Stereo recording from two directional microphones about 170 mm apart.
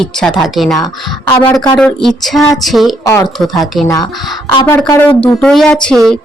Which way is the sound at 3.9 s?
25° left (ahead or behind).